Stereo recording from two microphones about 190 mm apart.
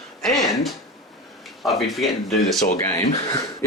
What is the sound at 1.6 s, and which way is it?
Speech, centre (ahead or behind).